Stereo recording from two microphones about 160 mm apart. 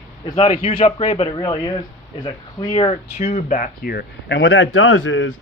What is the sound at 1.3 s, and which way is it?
A man's voice, 30° left (ahead or behind).